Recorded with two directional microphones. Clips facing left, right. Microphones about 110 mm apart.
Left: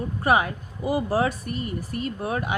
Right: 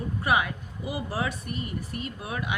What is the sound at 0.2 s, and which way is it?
Speech, 40° left (ahead or behind).